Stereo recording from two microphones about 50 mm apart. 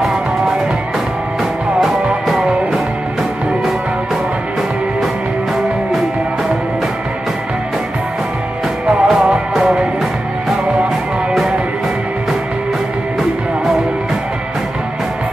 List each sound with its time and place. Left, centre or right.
0.0 s music: centre
2.2 s music: centre
9.0 s music: centre